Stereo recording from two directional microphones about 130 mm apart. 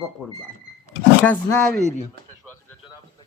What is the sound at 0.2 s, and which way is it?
A man's voice, 5° left (ahead or behind).